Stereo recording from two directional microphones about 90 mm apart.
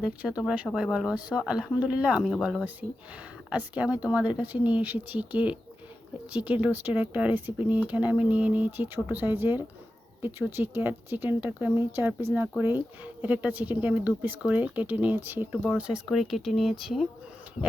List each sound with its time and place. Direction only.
0.0 s speech: 10° right (ahead or behind)
3.5 s speech: 15° right (ahead or behind)
15.8 s speech: 5° right (ahead or behind)